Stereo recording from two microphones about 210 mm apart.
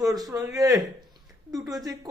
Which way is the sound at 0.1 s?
15° right (ahead or behind).